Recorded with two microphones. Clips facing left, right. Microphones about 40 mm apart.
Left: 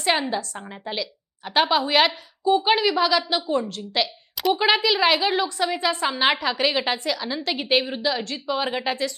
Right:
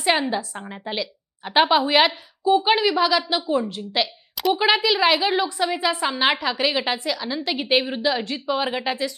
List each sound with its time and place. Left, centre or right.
0.0 s a woman's voice: centre